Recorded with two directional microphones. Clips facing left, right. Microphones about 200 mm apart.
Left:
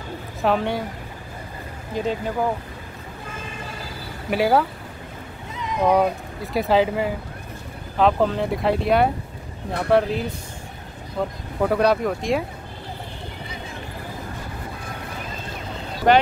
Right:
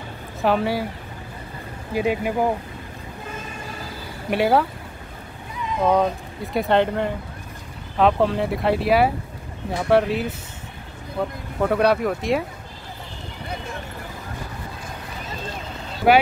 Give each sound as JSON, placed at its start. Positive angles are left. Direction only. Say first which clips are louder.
{"t": 0.4, "sound": "speech", "louder": "right 1 dB", "side_deg": 0}
{"t": 2.0, "sound": "speech", "louder": "right 3 dB", "side_deg": -10}
{"t": 4.3, "sound": "speech", "louder": "even", "side_deg": 0}
{"t": 5.6, "sound": "speech", "louder": "left 1 dB", "side_deg": 15}
{"t": 11.6, "sound": "speech", "louder": "even", "side_deg": 0}
{"t": 16.1, "sound": "speech", "louder": "even", "side_deg": -10}